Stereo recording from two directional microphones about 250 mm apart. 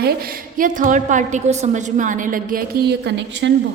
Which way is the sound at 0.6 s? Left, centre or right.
Right.